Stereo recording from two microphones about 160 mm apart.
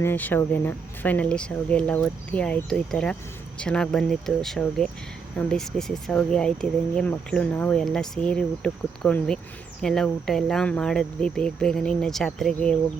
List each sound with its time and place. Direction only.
0.0 s speech: 10° left (ahead or behind)